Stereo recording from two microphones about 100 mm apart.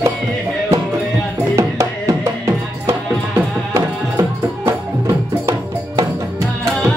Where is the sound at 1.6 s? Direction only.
30° right (ahead or behind).